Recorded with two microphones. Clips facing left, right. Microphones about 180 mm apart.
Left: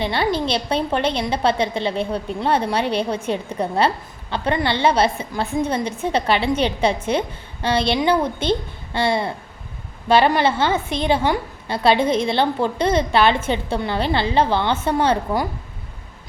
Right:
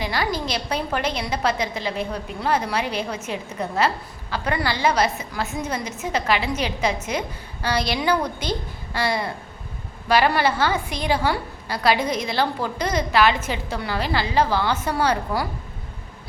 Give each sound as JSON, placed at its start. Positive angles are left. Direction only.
{"t": 0.0, "sound": "a woman's voice", "side_deg": 25}